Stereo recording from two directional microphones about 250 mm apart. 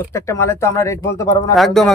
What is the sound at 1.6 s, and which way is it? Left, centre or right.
Speech, centre.